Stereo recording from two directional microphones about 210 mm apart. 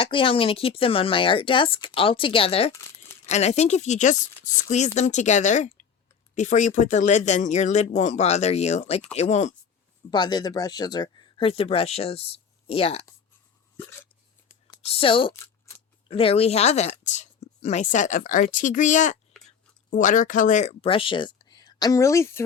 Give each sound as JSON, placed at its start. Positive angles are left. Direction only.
{"t": 0.0, "sound": "speech", "side_deg": 25}
{"t": 10.1, "sound": "speech", "side_deg": 20}
{"t": 13.7, "sound": "hiccup", "side_deg": 10}
{"t": 14.8, "sound": "speech", "side_deg": 30}
{"t": 19.3, "sound": "whispering", "side_deg": 0}
{"t": 19.9, "sound": "speech", "side_deg": 35}